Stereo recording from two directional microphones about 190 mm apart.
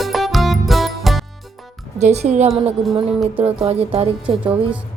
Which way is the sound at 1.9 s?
35° right (ahead or behind).